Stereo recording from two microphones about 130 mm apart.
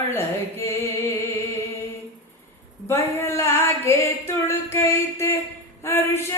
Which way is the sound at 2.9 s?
20° left (ahead or behind).